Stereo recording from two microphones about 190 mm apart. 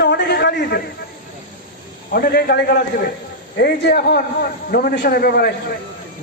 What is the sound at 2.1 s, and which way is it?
A man's voice, 55° left (ahead or behind).